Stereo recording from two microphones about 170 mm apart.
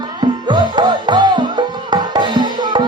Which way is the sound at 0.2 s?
25° right (ahead or behind).